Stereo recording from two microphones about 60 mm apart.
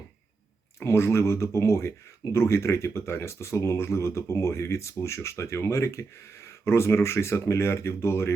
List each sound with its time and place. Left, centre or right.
0.8 s speech: left